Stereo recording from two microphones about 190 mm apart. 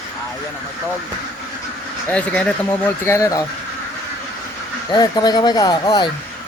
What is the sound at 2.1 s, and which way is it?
Speech, 5° left (ahead or behind).